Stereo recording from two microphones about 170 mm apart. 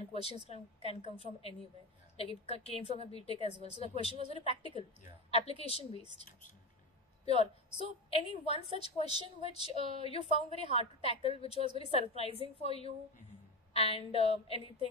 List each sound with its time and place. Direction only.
0.1 s a woman's voice: 35° left (ahead or behind)
7.2 s a woman's voice: 35° left (ahead or behind)